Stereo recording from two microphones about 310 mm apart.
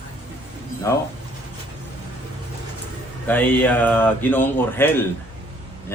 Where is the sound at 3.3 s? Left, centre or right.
Centre.